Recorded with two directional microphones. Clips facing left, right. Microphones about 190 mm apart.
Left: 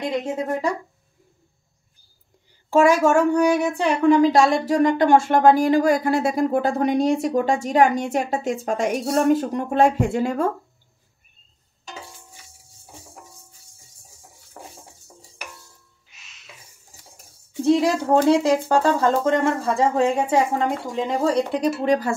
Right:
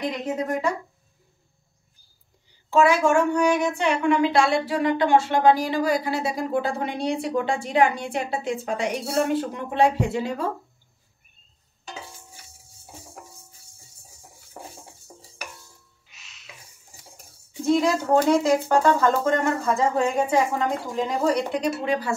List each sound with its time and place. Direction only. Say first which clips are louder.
0.5 s speech: left 1 dB; 35° left (ahead or behind)
2.7 s a woman's voice: left 3 dB; 45° left (ahead or behind)
17.6 s speech: left 2 dB; 35° left (ahead or behind)